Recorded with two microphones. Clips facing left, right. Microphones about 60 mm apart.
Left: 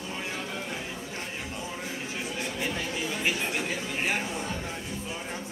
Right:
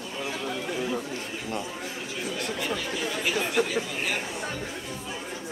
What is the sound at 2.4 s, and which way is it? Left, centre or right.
Chatter, right.